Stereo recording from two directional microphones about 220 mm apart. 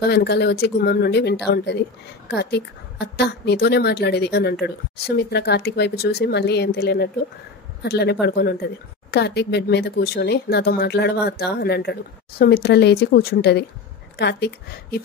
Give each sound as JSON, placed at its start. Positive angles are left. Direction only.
{"t": 0.0, "sound": "speech", "side_deg": 45}